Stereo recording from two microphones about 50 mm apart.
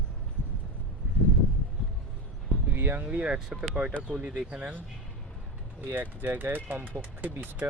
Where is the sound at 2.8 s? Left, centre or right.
Right.